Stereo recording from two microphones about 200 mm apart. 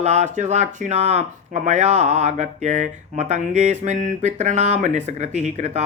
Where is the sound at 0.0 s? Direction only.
35° right (ahead or behind).